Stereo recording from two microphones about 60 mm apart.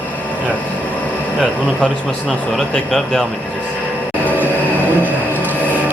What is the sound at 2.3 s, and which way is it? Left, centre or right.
Speech, centre.